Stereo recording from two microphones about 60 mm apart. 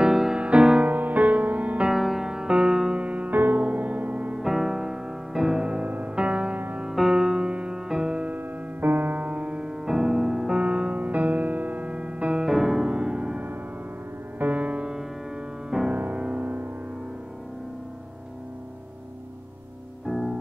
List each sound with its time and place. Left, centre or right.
0.0 s music: centre
0.8 s music: right
1.9 s music: centre
3.3 s music: right
4.4 s music: centre
6.9 s music: centre
8.4 s music: right
20.1 s music: centre